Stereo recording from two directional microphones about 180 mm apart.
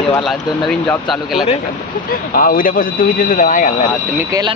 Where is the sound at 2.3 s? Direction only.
55° left (ahead or behind).